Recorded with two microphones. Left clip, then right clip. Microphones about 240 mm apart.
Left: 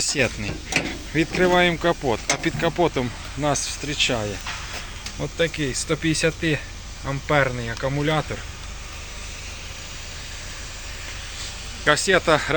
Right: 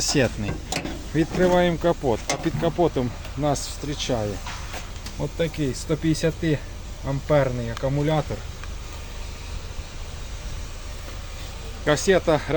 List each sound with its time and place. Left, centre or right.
0.0 s speech: right; by 8.2 s centre
11.9 s speech: centre